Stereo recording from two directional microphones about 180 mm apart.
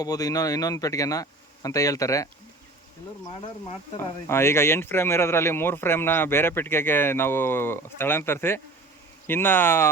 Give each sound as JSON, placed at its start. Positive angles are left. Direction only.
{"t": 0.0, "sound": "speech", "side_deg": 20}
{"t": 3.9, "sound": "speech", "side_deg": 15}